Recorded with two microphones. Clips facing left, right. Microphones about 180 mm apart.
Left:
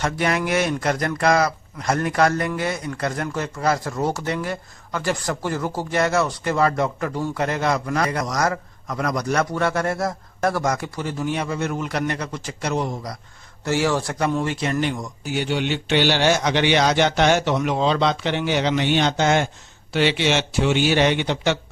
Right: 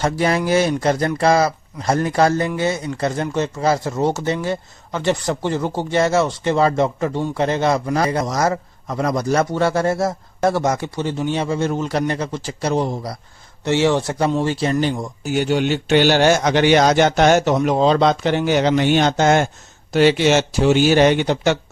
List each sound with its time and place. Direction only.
0.0 s speech: 30° right (ahead or behind)
13.7 s speech: 20° right (ahead or behind)
15.2 s a man's voice: 45° right (ahead or behind)